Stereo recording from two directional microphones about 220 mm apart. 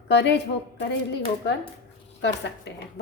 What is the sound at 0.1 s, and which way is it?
Speech, 50° left (ahead or behind).